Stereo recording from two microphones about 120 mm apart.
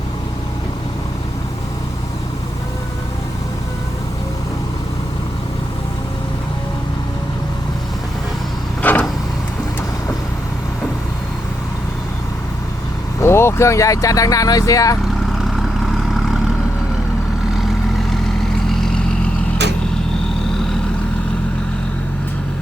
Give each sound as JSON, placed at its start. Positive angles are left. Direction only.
{"t": 8.8, "sound": "vehicle", "side_deg": 15}
{"t": 13.1, "sound": "speech", "side_deg": 20}
{"t": 18.7, "sound": "vehicle", "side_deg": 5}